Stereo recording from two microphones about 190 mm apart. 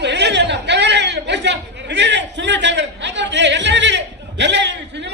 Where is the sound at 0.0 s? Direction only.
65° right (ahead or behind).